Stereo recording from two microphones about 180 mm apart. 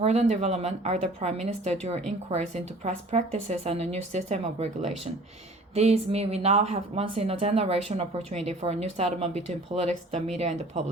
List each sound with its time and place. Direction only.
0.0 s a woman's voice: 35° right (ahead or behind)